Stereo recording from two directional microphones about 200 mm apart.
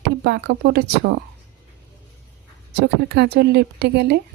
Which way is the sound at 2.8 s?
55° right (ahead or behind).